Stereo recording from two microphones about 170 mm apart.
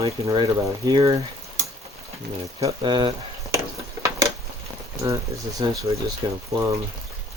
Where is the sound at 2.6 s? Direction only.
25° right (ahead or behind).